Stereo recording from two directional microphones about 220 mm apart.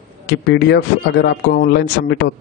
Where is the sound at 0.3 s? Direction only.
50° left (ahead or behind).